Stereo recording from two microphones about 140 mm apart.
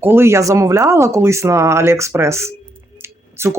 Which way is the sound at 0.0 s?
15° right (ahead or behind).